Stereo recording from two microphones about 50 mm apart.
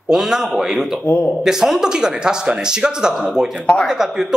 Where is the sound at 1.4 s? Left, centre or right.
Centre.